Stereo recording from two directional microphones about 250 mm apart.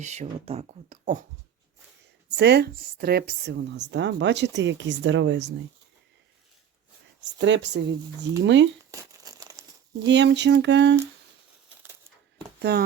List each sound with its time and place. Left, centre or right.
0.0 s speech: right
2.3 s a woman's voice: right
7.2 s a woman's voice: right
8.9 s crumpling: centre
10.1 s a woman's voice: right
12.5 s speech: right